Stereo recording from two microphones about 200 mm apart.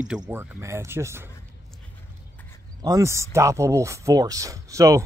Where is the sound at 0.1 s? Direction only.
10° right (ahead or behind).